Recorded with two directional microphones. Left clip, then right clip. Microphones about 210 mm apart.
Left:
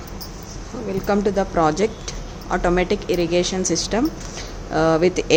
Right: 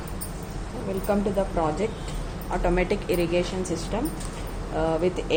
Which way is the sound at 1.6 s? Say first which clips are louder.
Left 7 dB; 45° left (ahead or behind).